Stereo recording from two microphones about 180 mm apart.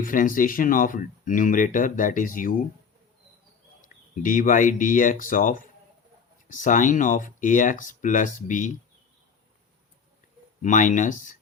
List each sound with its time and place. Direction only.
0.0 s speech: 50° left (ahead or behind)
3.8 s speech: 45° left (ahead or behind)
10.6 s speech: 45° left (ahead or behind)